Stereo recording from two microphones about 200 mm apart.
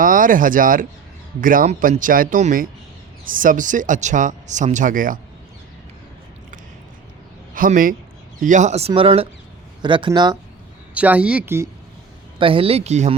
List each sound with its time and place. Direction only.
0.0 s speech: 40° right (ahead or behind)
7.5 s a man's voice: 45° right (ahead or behind); by 10.3 s 20° right (ahead or behind)
10.9 s speech: 5° right (ahead or behind)
12.4 s speech: 25° right (ahead or behind)